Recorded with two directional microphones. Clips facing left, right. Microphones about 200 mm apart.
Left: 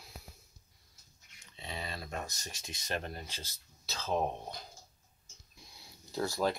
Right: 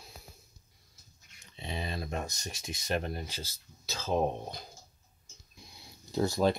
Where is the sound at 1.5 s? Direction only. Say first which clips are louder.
Right 5 dB; 20° right (ahead or behind).